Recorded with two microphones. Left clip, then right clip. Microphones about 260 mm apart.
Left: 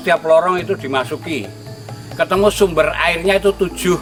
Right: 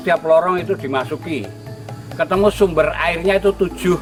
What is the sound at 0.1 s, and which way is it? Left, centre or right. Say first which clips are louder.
Speech: left 1 dB; centre.